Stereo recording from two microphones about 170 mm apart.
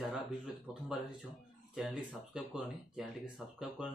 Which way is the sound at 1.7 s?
Centre (ahead or behind).